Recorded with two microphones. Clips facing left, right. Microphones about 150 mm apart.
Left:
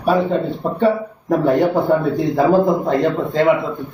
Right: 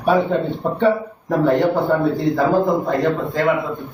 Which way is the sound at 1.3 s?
10° left (ahead or behind).